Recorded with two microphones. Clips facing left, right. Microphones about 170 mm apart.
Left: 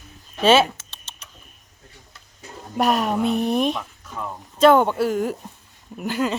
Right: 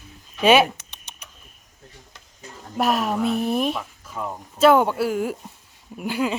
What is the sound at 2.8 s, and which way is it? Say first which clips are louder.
Speech: left 1 dB; centre (ahead or behind).